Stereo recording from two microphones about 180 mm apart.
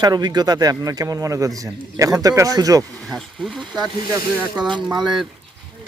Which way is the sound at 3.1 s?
Centre (ahead or behind).